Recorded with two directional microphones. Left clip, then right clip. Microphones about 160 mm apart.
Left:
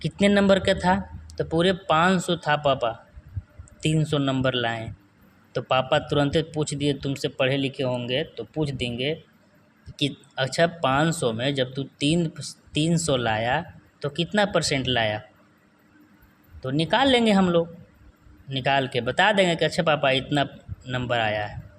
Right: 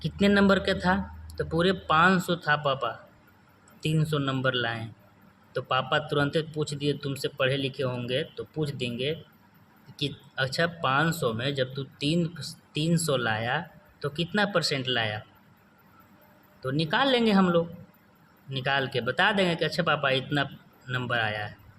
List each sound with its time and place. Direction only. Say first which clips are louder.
0.0 s speech: left 3 dB; 25° left (ahead or behind)
16.6 s speech: left 4 dB; 25° left (ahead or behind)